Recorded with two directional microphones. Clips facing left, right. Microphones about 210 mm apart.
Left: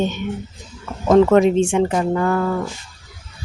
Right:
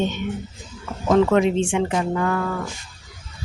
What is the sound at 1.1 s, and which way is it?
Speech, 45° left (ahead or behind).